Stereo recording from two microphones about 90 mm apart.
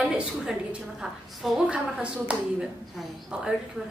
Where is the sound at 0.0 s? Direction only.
10° right (ahead or behind).